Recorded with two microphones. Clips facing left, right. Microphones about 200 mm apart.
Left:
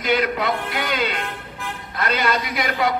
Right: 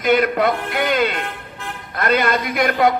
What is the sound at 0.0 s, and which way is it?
A man's voice, 50° right (ahead or behind).